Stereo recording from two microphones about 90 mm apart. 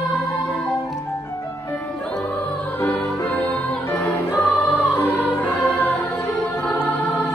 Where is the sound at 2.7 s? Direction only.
20° left (ahead or behind).